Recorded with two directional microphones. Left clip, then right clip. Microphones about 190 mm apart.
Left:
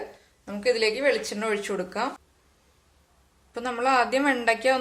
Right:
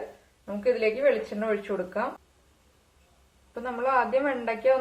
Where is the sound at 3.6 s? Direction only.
70° left (ahead or behind).